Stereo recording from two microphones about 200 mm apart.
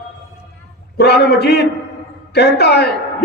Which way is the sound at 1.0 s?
55° left (ahead or behind).